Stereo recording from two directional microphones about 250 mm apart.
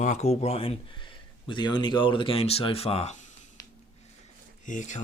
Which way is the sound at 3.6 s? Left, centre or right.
Centre.